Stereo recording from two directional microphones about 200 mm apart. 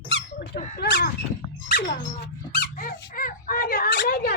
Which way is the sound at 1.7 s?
55° left (ahead or behind).